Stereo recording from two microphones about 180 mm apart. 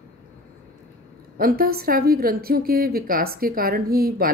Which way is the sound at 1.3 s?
55° right (ahead or behind).